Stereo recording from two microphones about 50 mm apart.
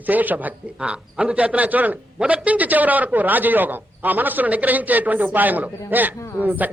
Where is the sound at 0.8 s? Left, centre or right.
Right.